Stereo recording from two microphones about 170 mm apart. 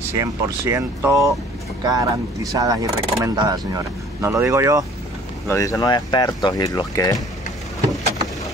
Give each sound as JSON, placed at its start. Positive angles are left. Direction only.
{"t": 0.2, "sound": "speech", "side_deg": -15}
{"t": 5.5, "sound": "speech", "side_deg": 20}